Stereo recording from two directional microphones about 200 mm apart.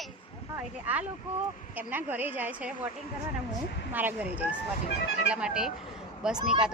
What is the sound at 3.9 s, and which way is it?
A woman's voice, 10° right (ahead or behind).